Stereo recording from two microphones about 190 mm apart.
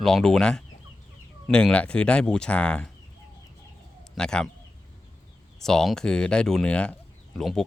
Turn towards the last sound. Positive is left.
turn(degrees=0)  # may be behind; listen again after turning